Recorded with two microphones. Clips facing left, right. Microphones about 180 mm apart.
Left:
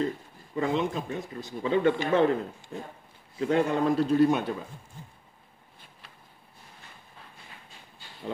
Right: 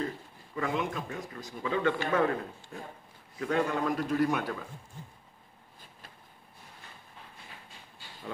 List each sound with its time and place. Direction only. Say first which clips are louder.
0.6 s speech: left 5 dB; 25° left (ahead or behind)